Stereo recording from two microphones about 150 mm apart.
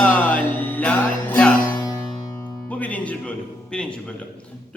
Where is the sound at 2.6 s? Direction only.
10° left (ahead or behind).